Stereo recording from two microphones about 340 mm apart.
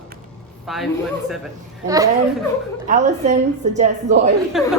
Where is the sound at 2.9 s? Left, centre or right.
Centre.